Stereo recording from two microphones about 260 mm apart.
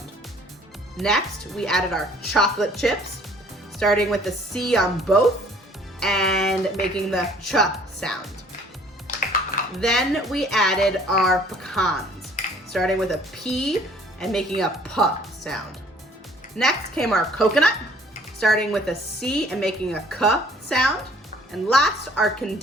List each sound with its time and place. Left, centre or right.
0.9 s speech: centre
9.1 s music: left
9.8 s speech: centre
16.6 s speech: centre